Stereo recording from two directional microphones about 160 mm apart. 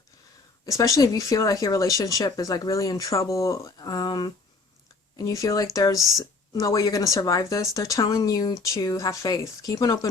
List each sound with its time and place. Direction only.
0.6 s speech: 20° left (ahead or behind)
6.0 s speech: centre (ahead or behind)
6.5 s speech: 20° left (ahead or behind)